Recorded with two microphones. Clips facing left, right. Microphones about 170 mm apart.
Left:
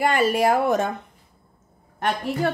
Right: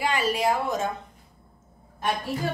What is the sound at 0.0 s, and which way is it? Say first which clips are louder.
Speech: left 5 dB; 50° left (ahead or behind).